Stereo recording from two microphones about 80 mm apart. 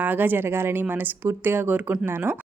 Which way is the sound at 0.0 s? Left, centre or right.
Right.